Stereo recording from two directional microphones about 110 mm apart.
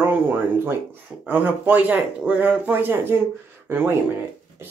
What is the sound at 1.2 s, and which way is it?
Speech, 15° right (ahead or behind).